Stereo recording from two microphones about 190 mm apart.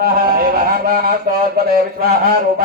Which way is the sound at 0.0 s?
50° right (ahead or behind).